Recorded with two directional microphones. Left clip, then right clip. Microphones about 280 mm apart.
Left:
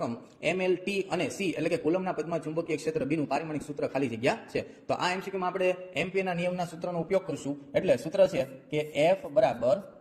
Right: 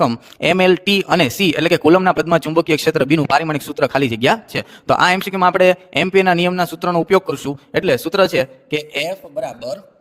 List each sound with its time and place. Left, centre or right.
0.0 s a man's voice: right
9.0 s a man's voice: centre